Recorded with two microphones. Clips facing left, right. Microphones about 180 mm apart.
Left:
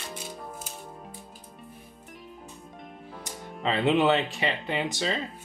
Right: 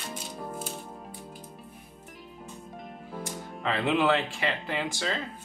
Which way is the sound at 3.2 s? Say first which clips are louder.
Left 2 dB; 20° left (ahead or behind).